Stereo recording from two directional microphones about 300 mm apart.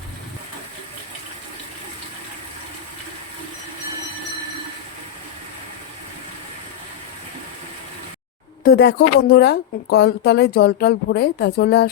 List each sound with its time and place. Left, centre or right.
8.6 s a woman's voice: left